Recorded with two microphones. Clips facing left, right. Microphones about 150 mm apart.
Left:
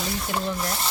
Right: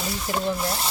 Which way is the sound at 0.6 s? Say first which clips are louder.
Right 1 dB; 5° right (ahead or behind).